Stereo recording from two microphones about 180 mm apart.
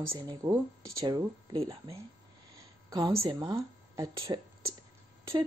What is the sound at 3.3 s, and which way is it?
Speech, 20° right (ahead or behind).